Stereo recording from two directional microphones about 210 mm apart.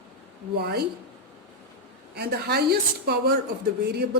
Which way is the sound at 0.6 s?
50° right (ahead or behind).